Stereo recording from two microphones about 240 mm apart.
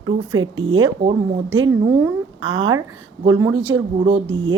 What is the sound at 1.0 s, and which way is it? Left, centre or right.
Speech, right.